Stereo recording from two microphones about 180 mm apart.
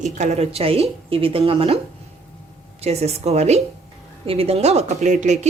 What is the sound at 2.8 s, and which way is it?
Speech, 35° right (ahead or behind).